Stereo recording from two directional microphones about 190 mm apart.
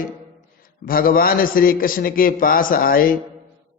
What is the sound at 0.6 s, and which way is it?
A man's voice, 50° left (ahead or behind).